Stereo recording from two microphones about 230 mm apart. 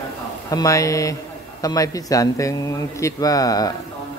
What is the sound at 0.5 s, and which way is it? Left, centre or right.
A man's voice, centre.